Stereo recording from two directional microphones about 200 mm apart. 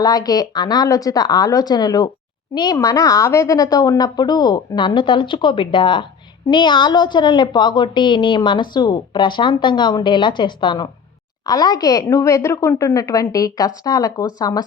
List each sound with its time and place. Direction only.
0.0 s a woman's voice: 20° left (ahead or behind)